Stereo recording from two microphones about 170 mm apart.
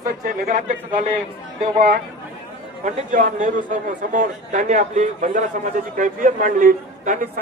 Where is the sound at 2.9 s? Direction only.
45° right (ahead or behind).